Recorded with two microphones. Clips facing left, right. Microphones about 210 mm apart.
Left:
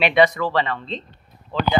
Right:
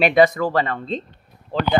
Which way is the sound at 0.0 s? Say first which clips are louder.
Right 2 dB; 45° right (ahead or behind).